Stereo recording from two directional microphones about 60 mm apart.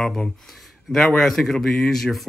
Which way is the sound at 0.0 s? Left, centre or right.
Centre.